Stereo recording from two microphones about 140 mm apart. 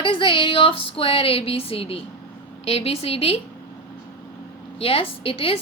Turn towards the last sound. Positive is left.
turn(degrees=40)  # may be behind; listen again after turning